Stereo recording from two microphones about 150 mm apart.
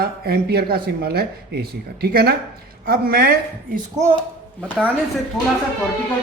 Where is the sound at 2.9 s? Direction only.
80° right.